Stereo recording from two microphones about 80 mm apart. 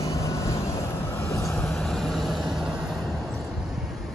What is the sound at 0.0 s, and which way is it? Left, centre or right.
Vehicle, left.